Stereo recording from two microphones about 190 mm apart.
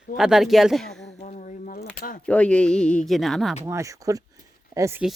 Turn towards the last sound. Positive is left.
turn(degrees=-15)  # may be behind; listen again after turning